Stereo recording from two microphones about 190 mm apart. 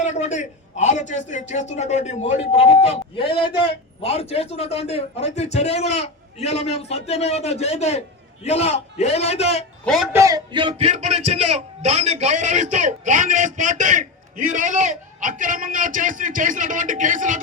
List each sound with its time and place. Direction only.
0.0 s a man's voice: 35° left (ahead or behind)
9.8 s a man's voice: centre (ahead or behind)
10.1 s speech: 15° right (ahead or behind); by 17.4 s 40° right (ahead or behind)